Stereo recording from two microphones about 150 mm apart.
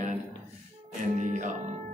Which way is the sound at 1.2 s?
55° right (ahead or behind).